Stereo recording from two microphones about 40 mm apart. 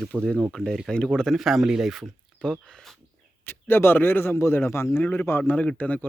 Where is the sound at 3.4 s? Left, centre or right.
Left.